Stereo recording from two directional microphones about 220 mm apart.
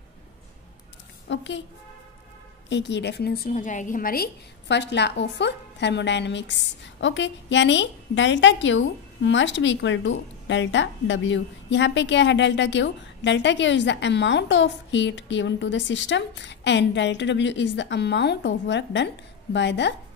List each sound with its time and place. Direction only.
1.3 s a woman's voice: 55° left (ahead or behind)
2.7 s a woman's voice: 55° left (ahead or behind)